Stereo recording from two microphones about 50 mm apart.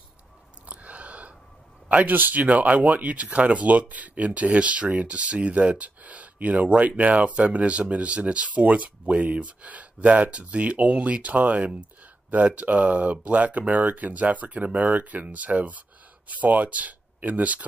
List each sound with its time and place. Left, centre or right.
0.7 s a sound: right
1.9 s speech: right
2.1 s speech: right
2.4 s speech: right